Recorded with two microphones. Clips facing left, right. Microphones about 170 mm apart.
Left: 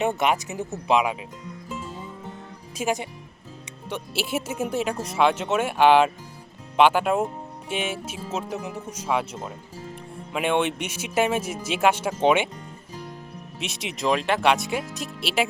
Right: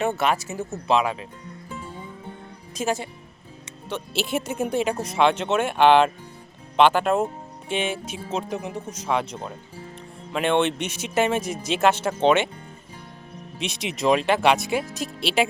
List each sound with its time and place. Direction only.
0.2 s speech: 15° left (ahead or behind)
2.7 s speech: 15° left (ahead or behind)
13.6 s speech: centre (ahead or behind)